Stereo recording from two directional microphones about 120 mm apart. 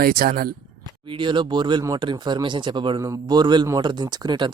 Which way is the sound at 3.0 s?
30° right (ahead or behind).